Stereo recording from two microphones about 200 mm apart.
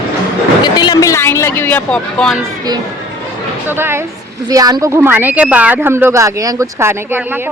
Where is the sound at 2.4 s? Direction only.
20° right (ahead or behind).